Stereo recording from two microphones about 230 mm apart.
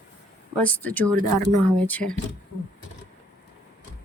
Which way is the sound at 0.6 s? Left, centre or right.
Centre.